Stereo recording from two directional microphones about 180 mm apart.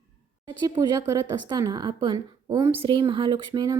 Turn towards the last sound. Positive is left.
turn(degrees=-25)  # may be behind; listen again after turning